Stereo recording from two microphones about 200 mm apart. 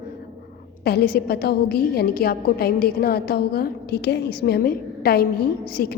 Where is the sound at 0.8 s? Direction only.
55° left (ahead or behind).